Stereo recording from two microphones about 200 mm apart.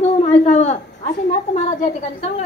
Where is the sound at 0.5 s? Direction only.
35° left (ahead or behind).